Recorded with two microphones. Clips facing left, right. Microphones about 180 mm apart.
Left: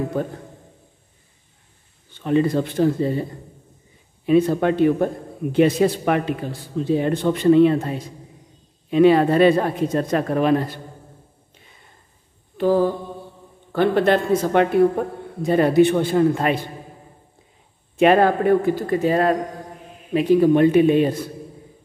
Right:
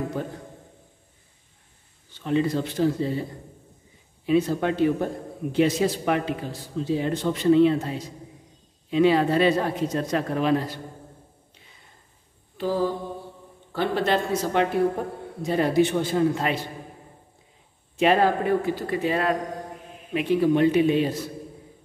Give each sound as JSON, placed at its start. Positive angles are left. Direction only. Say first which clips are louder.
{"t": 0.2, "sound": "speech", "louder": "left 6 dB", "side_deg": 55}
{"t": 2.1, "sound": "speech", "louder": "left 5 dB", "side_deg": 55}
{"t": 4.3, "sound": "a man's voice", "louder": "left 5 dB", "side_deg": 55}
{"t": 12.5, "sound": "mantra", "louder": "left 7 dB", "side_deg": 55}
{"t": 13.7, "sound": "a man's voice", "louder": "left 7 dB", "side_deg": 55}
{"t": 17.9, "sound": "speech", "louder": "left 5 dB", "side_deg": 55}